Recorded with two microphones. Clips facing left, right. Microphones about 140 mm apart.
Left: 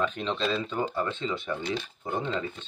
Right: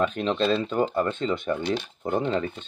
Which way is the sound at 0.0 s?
45° right (ahead or behind).